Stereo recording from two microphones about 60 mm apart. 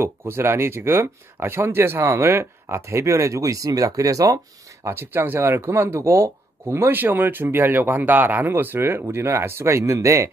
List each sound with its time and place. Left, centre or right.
0.0 s speech: right
2.0 s speech: right
4.8 s speech: right
5.4 s speech: right